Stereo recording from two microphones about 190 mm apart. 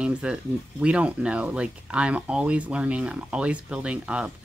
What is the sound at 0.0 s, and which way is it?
Speech, 5° right (ahead or behind).